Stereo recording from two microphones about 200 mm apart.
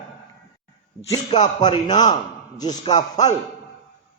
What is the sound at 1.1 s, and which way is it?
A man's voice, 20° left (ahead or behind).